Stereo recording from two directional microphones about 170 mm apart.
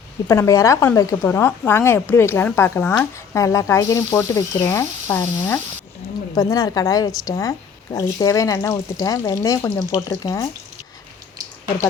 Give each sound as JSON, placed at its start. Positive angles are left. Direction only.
{"t": 0.3, "sound": "a woman's voice", "side_deg": 20}